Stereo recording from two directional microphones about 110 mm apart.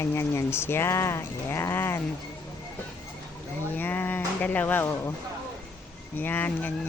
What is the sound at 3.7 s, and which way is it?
Speech, 15° left (ahead or behind).